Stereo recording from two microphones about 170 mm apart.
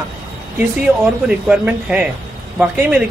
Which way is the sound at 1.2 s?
5° right (ahead or behind).